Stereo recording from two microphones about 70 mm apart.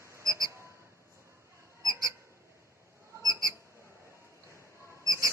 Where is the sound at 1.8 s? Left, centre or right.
Right.